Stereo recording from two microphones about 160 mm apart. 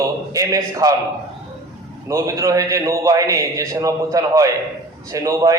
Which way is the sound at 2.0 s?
20° right (ahead or behind).